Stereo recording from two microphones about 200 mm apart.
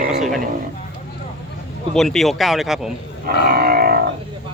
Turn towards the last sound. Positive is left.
turn(degrees=-45)  # may be behind; listen again after turning